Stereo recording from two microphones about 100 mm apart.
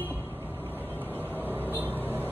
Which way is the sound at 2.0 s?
20° right (ahead or behind).